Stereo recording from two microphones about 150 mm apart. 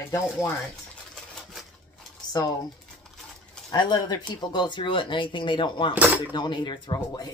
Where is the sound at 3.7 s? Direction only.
30° left (ahead or behind).